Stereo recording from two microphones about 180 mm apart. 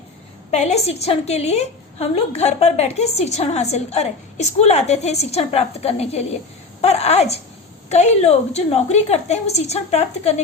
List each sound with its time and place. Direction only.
0.5 s a woman's voice: 35° left (ahead or behind)